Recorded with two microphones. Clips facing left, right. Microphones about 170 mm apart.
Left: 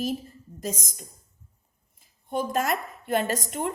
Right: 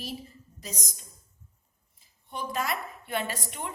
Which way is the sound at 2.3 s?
45° left (ahead or behind).